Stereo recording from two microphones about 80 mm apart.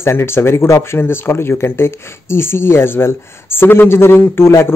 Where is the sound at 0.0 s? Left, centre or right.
Left.